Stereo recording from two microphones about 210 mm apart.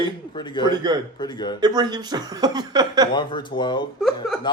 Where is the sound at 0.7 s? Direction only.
20° right (ahead or behind).